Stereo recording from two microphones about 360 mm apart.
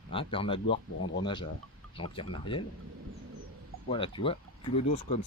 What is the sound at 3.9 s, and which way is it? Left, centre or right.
Speech, centre.